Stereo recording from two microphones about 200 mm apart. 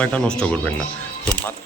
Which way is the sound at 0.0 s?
5° left (ahead or behind).